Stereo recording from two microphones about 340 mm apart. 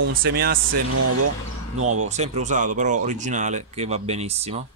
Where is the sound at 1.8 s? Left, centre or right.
Right.